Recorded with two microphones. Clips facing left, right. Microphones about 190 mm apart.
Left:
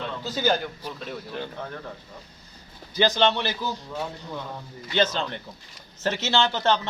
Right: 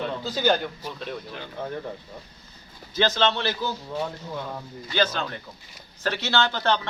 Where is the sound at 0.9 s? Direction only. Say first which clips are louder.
Right 1 dB; 5° left (ahead or behind).